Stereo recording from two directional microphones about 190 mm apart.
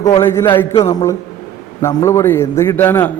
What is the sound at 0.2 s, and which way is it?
Speech, 15° left (ahead or behind).